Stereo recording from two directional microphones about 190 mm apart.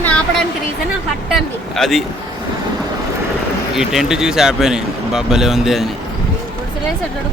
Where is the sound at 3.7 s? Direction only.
Centre (ahead or behind).